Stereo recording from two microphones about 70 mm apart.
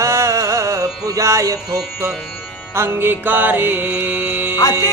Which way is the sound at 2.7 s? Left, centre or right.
Right.